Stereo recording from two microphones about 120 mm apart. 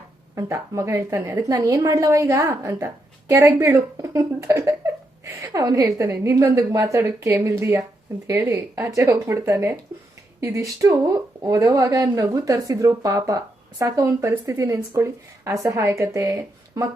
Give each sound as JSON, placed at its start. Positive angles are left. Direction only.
{"t": 0.3, "sound": "a woman's voice", "side_deg": -25}